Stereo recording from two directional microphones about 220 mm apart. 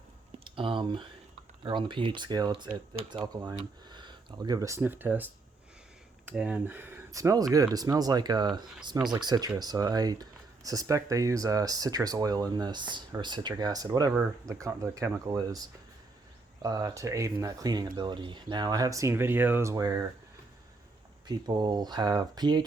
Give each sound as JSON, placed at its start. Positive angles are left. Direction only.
{"t": 0.3, "sound": "a sound", "side_deg": -25}
{"t": 1.6, "sound": "speech", "side_deg": -20}
{"t": 21.2, "sound": "speech", "side_deg": -20}